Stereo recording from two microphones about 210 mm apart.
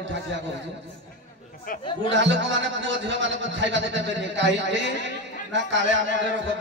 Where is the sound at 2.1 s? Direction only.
60° right (ahead or behind).